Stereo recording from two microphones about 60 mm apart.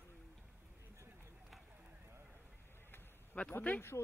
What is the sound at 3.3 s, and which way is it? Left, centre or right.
Speech, left.